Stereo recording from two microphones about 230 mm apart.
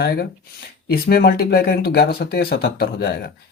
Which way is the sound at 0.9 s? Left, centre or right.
Left.